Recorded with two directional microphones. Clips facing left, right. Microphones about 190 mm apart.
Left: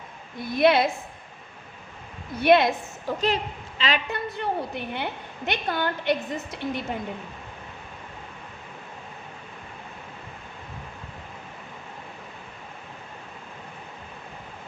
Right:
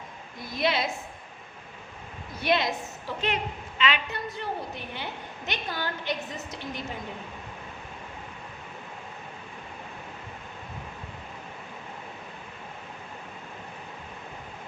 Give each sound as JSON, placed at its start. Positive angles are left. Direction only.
{"t": 0.5, "sound": "a woman's voice", "side_deg": 60}
{"t": 2.4, "sound": "a woman's voice", "side_deg": 60}
{"t": 3.2, "sound": "a woman's voice", "side_deg": 35}
{"t": 4.1, "sound": "a woman's voice", "side_deg": 60}